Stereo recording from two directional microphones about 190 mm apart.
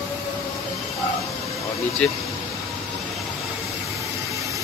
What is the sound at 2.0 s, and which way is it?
Speech, 5° left (ahead or behind).